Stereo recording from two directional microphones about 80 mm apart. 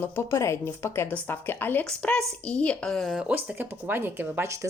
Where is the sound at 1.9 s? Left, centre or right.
Centre.